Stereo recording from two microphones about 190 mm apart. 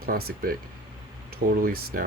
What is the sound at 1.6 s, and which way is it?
Speech, 50° right (ahead or behind).